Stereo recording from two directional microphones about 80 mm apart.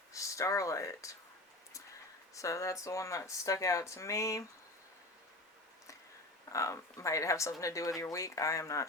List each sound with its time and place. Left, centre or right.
0.1 s speech: left
2.3 s speech: left
6.5 s speech: left